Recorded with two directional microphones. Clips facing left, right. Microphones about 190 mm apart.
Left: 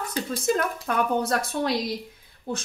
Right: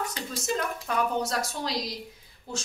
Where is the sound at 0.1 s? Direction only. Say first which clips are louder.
Left 6 dB; 55° left (ahead or behind).